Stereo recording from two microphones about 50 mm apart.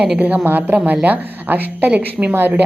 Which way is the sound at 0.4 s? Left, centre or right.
Right.